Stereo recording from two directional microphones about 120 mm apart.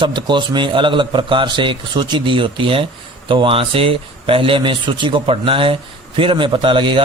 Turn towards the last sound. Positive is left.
turn(degrees=-45)  # may be behind; listen again after turning